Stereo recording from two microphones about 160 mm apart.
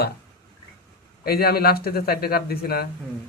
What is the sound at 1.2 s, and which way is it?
Speech, 75° left (ahead or behind).